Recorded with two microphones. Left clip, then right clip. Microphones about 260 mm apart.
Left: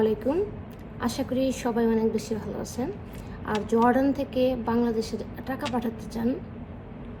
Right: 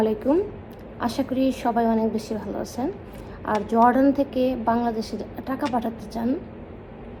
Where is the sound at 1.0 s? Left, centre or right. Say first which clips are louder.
Right 3 dB; right.